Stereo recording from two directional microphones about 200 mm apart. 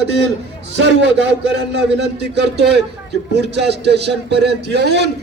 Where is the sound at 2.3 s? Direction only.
55° right (ahead or behind).